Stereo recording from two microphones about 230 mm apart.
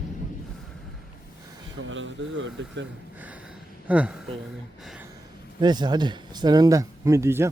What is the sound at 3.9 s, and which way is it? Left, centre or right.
Speech, centre.